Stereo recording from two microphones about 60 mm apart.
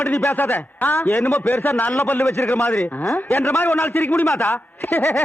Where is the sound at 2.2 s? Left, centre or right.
Left.